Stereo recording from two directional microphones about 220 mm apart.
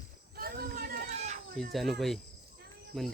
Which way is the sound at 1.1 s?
30° right (ahead or behind).